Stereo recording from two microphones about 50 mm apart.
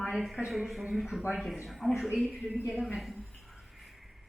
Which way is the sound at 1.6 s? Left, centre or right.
Centre.